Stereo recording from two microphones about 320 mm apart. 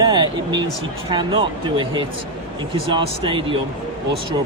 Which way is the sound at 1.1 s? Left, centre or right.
Centre.